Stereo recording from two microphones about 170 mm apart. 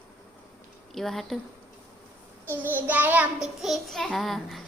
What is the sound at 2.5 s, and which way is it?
Child singing, 10° right (ahead or behind).